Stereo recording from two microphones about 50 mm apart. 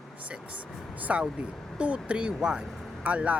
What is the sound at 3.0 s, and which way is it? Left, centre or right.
Speech, right.